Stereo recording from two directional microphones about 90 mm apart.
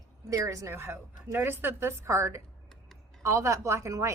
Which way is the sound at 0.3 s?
35° right (ahead or behind).